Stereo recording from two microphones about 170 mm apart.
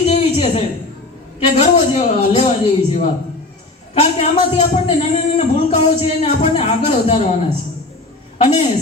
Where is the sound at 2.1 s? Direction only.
40° left (ahead or behind).